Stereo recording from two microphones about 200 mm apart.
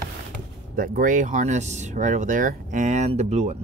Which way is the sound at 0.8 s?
40° right (ahead or behind).